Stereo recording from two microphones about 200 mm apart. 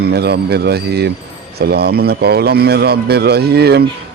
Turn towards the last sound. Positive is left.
turn(degrees=-55)  # may be behind; listen again after turning